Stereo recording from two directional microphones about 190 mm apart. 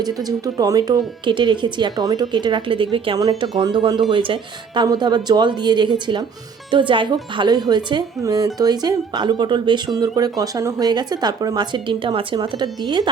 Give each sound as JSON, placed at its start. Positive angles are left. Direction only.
{"t": 0.0, "sound": "speech", "side_deg": -20}